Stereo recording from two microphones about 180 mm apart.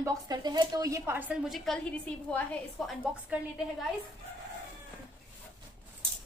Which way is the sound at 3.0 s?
10° right (ahead or behind).